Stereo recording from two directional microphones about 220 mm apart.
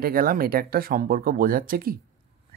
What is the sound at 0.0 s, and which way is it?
Speech, 40° right (ahead or behind).